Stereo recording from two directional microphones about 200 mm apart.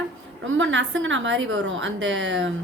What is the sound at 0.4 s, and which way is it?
A woman's voice, 70° right (ahead or behind).